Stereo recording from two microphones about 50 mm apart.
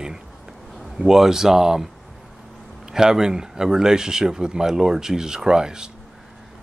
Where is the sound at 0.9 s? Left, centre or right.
Centre.